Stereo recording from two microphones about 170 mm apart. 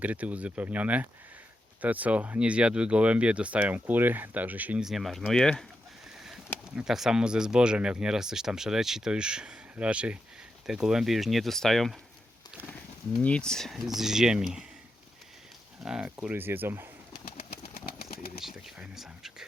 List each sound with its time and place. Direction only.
0.0 s speech: 10° right (ahead or behind)
6.7 s speech: centre (ahead or behind)
13.1 s speech: 5° left (ahead or behind)
15.8 s speech: 5° right (ahead or behind)
17.7 s pigeon: 65° left (ahead or behind)
18.3 s speech: centre (ahead or behind)